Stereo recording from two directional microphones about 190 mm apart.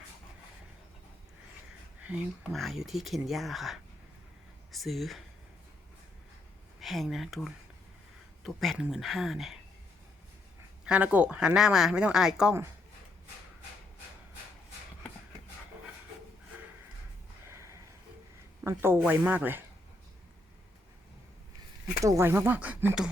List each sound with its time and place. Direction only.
2.0 s speech: centre (ahead or behind)
6.7 s speech: centre (ahead or behind)
10.8 s speech: 5° right (ahead or behind)
17.5 s a sound: 15° right (ahead or behind)
18.6 s speech: 15° right (ahead or behind)
22.0 s speech: 15° right (ahead or behind)